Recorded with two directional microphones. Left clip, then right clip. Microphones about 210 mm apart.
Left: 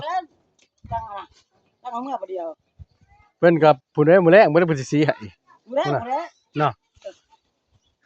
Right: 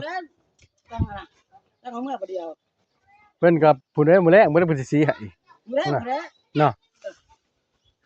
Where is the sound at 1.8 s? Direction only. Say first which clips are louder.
Left 2 dB; 20° right (ahead or behind).